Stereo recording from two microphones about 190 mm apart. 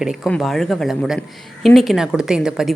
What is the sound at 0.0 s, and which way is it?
A woman's voice, centre (ahead or behind).